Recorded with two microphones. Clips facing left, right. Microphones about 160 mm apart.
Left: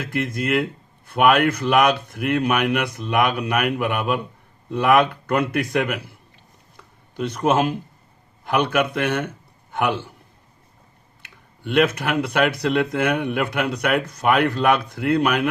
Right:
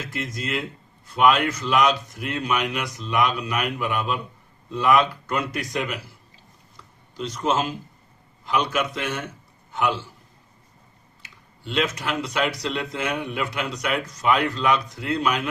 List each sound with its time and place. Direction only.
0.0 s a man's voice: 55° left (ahead or behind)
11.2 s speech: 60° left (ahead or behind)